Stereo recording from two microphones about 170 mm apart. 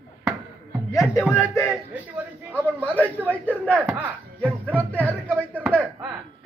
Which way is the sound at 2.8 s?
10° left (ahead or behind).